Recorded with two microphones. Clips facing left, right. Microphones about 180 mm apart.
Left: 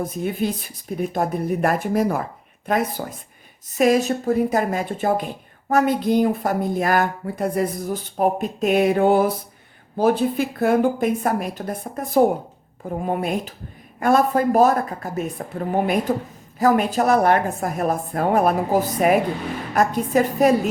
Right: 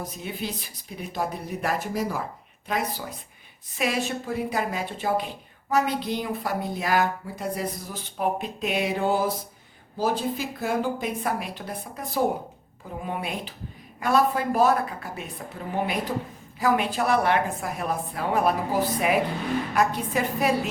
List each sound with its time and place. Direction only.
0.0 s speech: 50° left (ahead or behind)